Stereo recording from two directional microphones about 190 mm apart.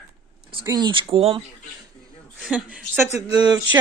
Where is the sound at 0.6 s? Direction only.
20° right (ahead or behind).